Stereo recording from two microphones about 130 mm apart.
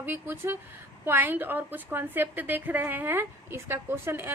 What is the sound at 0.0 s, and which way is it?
A woman's voice, 15° right (ahead or behind).